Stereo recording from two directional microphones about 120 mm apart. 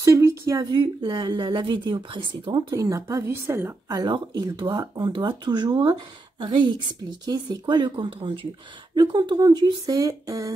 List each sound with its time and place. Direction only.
0.0 s a sound: 25° right (ahead or behind)
0.7 s speech: 40° right (ahead or behind); by 4.0 s 20° right (ahead or behind)
4.0 s speech: 35° right (ahead or behind)